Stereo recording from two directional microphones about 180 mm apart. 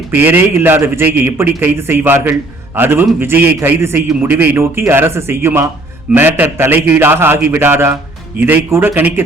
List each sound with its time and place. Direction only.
0.1 s a man's voice: 10° right (ahead or behind)